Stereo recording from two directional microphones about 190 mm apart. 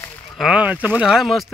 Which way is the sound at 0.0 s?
10° left (ahead or behind).